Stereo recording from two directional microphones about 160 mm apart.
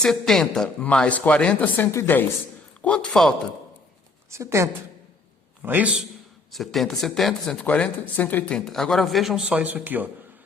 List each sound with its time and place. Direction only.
0.0 s speech: centre (ahead or behind)
4.3 s a woman's voice: 20° right (ahead or behind)
6.5 s speech: centre (ahead or behind)